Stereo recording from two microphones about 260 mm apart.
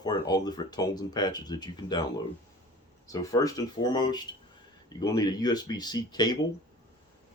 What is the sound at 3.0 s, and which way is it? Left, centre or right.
Speech, centre.